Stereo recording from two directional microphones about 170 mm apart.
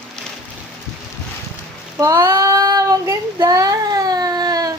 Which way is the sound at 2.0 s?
15° right (ahead or behind).